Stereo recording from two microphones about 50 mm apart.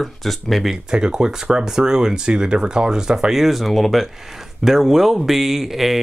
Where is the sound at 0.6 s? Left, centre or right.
Centre.